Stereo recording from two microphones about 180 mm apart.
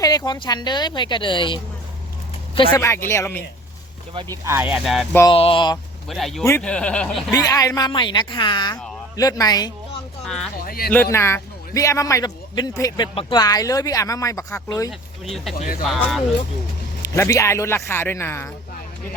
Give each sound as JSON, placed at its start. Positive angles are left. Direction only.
{"t": 0.3, "sound": "speech", "side_deg": 25}
{"t": 2.7, "sound": "speech", "side_deg": 15}
{"t": 4.1, "sound": "speech", "side_deg": -25}
{"t": 4.4, "sound": "speech", "side_deg": -10}
{"t": 5.3, "sound": "speech", "side_deg": 30}
{"t": 6.1, "sound": "speech", "side_deg": 0}
{"t": 7.3, "sound": "speech", "side_deg": 20}
{"t": 10.2, "sound": "speech", "side_deg": 5}
{"t": 10.6, "sound": "speech", "side_deg": 55}
{"t": 10.9, "sound": "a man's voice", "side_deg": 10}
{"t": 14.8, "sound": "speech", "side_deg": 0}
{"t": 15.5, "sound": "speech", "side_deg": 45}
{"t": 15.8, "sound": "speech", "side_deg": 0}
{"t": 17.0, "sound": "speech", "side_deg": 15}